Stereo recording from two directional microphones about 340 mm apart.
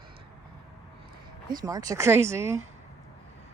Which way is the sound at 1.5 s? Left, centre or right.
Centre.